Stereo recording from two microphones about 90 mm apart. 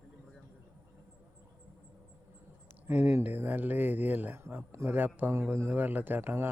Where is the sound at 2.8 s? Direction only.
20° right (ahead or behind).